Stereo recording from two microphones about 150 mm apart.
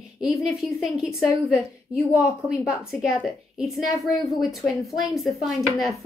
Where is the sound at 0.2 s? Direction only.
Centre (ahead or behind).